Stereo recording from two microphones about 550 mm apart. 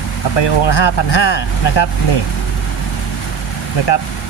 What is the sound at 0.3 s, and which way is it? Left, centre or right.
Speech, left.